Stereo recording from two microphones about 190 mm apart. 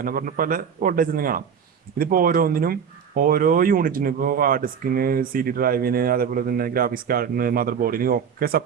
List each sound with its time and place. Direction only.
0.0 s speech: 50° right (ahead or behind)